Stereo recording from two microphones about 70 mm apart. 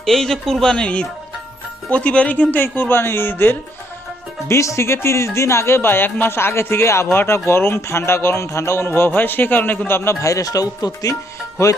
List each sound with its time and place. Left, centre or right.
0.0 s a man's voice: centre; by 3.6 s left
4.4 s speech: left
8.9 s speech: left